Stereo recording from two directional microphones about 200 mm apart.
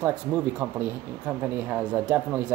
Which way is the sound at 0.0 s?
10° right (ahead or behind).